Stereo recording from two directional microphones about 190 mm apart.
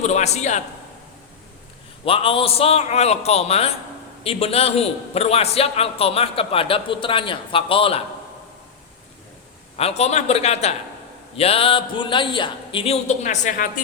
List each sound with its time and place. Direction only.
0.0 s a sound: 35° left (ahead or behind)
2.0 s a man's voice: 30° left (ahead or behind)
9.7 s a man's voice: 35° left (ahead or behind)